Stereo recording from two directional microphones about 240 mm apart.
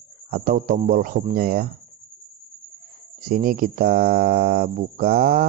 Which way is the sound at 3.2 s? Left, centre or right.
Right.